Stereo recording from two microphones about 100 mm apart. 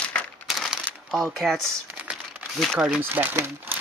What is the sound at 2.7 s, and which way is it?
Speech, 5° right (ahead or behind).